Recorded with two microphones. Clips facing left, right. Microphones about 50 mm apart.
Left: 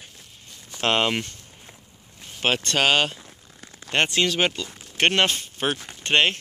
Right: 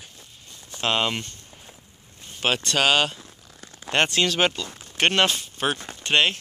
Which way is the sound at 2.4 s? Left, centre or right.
Left.